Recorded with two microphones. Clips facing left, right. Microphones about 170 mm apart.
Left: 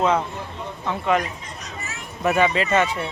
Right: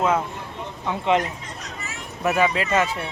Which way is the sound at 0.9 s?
20° right (ahead or behind).